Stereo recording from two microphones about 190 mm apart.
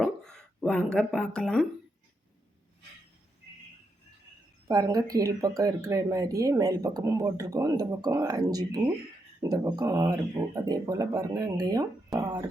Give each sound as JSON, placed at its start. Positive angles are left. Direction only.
{"t": 0.0, "sound": "speech", "side_deg": 5}
{"t": 4.7, "sound": "speech", "side_deg": -20}